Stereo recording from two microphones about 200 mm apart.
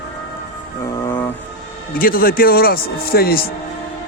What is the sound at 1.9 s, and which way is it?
A man's voice, 45° left (ahead or behind).